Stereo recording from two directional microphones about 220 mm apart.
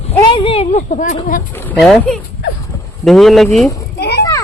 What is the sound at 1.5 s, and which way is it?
Speech, 5° left (ahead or behind).